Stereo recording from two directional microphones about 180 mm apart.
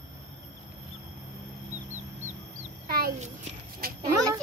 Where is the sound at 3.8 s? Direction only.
55° right (ahead or behind).